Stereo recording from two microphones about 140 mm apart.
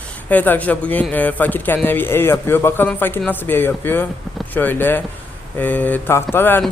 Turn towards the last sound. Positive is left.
turn(degrees=15)  # may be behind; listen again after turning